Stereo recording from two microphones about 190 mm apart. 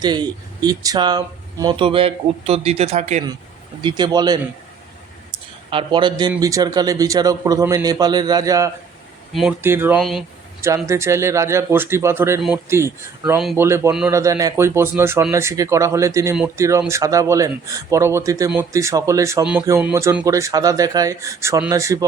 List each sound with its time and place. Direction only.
0.0 s speech: 20° right (ahead or behind); by 3.2 s 35° right (ahead or behind)
3.8 s speech: 20° right (ahead or behind)
5.7 s speech: 25° right (ahead or behind)
9.3 s speech: centre (ahead or behind)
9.6 s speech: 10° right (ahead or behind)
10.0 s speech: centre (ahead or behind)
10.8 s speech: 15° right (ahead or behind)